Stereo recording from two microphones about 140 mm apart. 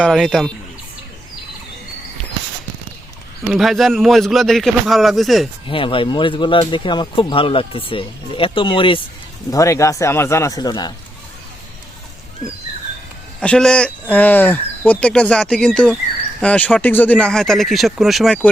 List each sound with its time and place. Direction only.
0.0 s speech: centre (ahead or behind)
3.5 s speech: centre (ahead or behind)
5.6 s speech: 40° left (ahead or behind)
9.5 s speech: 25° left (ahead or behind)
13.4 s speech: 5° left (ahead or behind)